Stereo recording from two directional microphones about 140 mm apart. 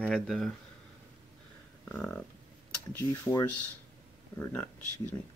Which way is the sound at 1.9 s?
10° left (ahead or behind).